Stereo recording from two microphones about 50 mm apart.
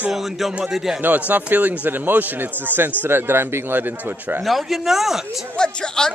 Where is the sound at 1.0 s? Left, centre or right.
Right.